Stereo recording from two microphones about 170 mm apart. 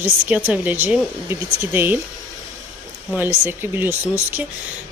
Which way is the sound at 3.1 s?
10° right (ahead or behind).